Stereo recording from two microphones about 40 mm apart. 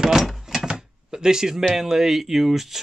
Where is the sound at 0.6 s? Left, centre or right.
Centre.